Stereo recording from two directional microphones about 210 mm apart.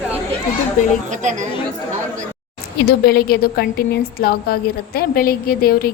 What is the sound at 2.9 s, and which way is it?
Speech, 50° left (ahead or behind).